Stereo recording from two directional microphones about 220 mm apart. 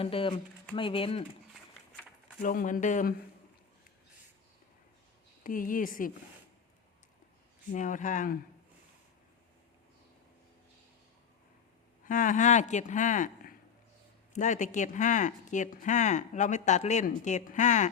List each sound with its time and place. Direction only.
0.0 s speech: 25° left (ahead or behind)
2.4 s speech: 40° left (ahead or behind)
5.4 s speech: 40° left (ahead or behind)
7.7 s speech: 35° left (ahead or behind)
12.0 s speech: 35° left (ahead or behind)